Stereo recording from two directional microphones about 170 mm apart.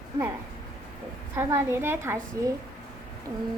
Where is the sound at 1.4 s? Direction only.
15° right (ahead or behind).